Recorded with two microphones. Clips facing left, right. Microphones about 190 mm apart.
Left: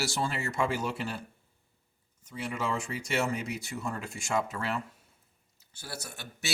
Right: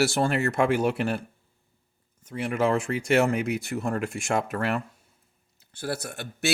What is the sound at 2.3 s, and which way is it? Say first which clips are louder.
Speech: right 9 dB; 55° right (ahead or behind).